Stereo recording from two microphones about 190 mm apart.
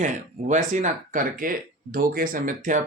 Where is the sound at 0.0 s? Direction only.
40° right (ahead or behind).